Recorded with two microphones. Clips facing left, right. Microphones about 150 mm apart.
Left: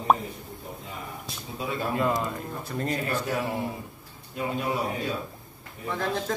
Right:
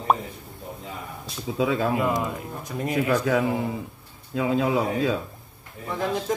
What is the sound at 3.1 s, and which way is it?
A man's voice, 90° right.